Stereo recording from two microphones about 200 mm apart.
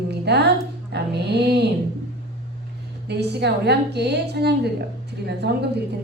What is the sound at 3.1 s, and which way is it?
A woman's voice, 55° right (ahead or behind).